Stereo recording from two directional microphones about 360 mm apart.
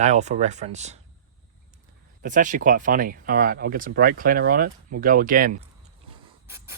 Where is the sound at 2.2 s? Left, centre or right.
Right.